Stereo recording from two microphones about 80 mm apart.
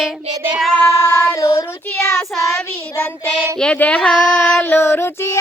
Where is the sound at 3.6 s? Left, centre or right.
Centre.